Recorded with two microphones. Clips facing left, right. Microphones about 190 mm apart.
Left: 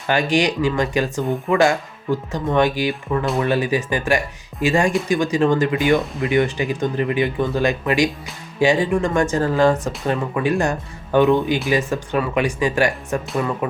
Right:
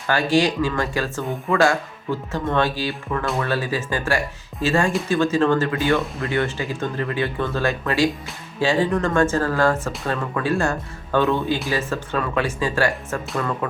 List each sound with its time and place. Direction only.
0.1 s speech: 15° left (ahead or behind)